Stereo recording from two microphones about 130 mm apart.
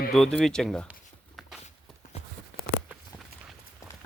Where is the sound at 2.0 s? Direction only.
80° left.